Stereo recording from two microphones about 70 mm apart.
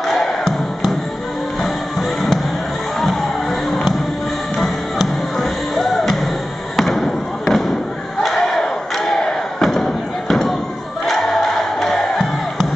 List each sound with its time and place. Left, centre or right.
0.0 s music: centre
4.6 s music: centre
6.8 s basketball bounce: centre
8.2 s crowd: centre